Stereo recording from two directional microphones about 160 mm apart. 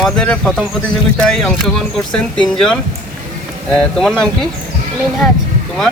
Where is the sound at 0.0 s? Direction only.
5° left (ahead or behind).